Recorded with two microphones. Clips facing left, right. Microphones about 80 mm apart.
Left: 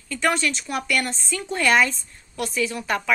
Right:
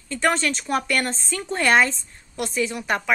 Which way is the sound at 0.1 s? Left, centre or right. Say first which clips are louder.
Right 1 dB; right.